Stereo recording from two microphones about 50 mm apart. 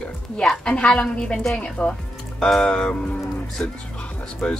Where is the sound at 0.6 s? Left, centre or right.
Centre.